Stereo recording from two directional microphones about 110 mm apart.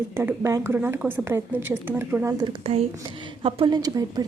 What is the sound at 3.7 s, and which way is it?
Speech, 35° right (ahead or behind).